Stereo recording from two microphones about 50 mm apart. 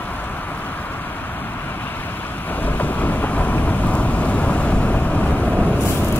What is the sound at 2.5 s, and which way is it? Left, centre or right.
Thunder, left.